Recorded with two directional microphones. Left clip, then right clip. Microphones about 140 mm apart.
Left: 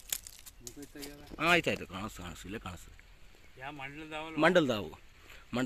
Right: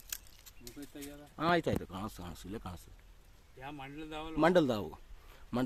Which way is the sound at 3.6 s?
20° right (ahead or behind).